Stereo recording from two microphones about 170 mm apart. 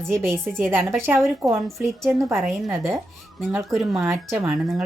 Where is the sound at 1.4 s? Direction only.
10° right (ahead or behind).